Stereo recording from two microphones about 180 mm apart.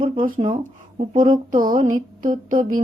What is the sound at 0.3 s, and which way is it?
A woman's voice, 45° right (ahead or behind).